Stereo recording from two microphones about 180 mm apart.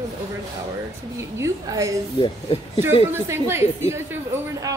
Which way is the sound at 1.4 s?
15° right (ahead or behind).